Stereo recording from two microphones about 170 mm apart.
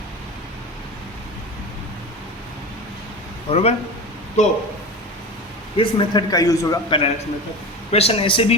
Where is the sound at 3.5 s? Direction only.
35° left (ahead or behind).